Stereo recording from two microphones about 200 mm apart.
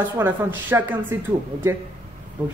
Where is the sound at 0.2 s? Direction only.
10° right (ahead or behind).